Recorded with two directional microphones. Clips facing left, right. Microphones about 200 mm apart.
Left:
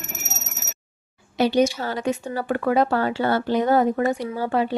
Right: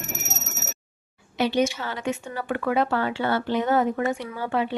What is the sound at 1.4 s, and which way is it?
Speech, 40° left (ahead or behind).